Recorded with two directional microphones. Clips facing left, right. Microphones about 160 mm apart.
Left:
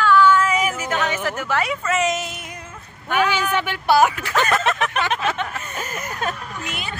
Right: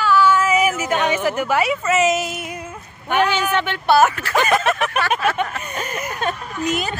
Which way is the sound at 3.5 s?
10° left (ahead or behind).